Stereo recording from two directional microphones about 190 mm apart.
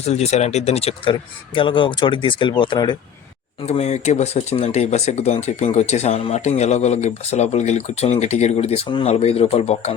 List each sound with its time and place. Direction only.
0.0 s speech: 35° left (ahead or behind)
3.7 s speech: 35° left (ahead or behind)